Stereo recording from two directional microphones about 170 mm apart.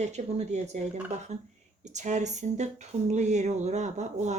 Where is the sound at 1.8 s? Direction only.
45° right (ahead or behind).